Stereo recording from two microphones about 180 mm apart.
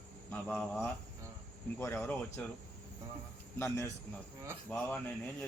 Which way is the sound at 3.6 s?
15° left (ahead or behind).